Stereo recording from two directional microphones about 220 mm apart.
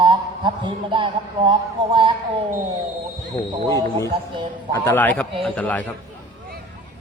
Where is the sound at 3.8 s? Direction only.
15° left (ahead or behind).